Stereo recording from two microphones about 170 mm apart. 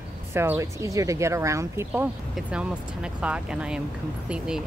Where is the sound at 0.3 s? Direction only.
15° right (ahead or behind).